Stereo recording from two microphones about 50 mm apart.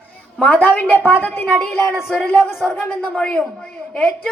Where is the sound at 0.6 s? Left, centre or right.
Left.